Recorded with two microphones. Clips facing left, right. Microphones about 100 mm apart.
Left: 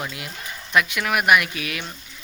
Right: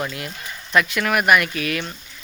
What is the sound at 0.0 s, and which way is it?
Speech, 10° left (ahead or behind).